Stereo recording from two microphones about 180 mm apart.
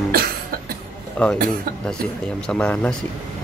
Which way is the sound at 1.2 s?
5° left (ahead or behind).